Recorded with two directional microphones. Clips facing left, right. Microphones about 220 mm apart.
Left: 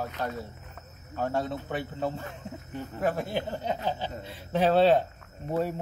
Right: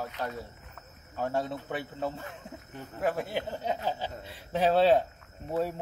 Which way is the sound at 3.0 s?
5° right (ahead or behind).